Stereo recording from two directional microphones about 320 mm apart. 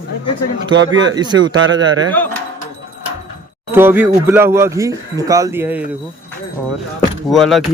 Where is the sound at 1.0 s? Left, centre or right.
Centre.